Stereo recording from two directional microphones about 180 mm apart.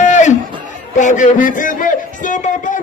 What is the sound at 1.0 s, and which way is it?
Speech, 45° left (ahead or behind).